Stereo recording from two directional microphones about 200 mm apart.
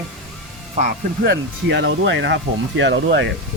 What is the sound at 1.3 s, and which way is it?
Speech, 65° right (ahead or behind).